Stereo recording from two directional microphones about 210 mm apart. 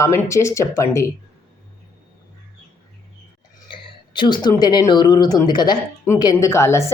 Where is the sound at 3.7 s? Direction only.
20° left (ahead or behind).